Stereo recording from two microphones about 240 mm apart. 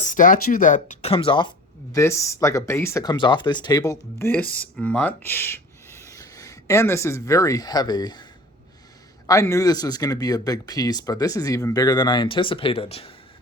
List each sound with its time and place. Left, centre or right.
0.0 s speech: left